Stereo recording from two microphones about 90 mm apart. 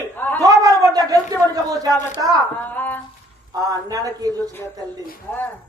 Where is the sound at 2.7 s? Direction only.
20° left (ahead or behind).